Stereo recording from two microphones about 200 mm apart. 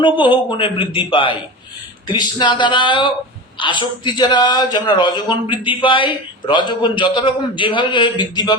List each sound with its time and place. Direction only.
0.0 s speech: 25° left (ahead or behind)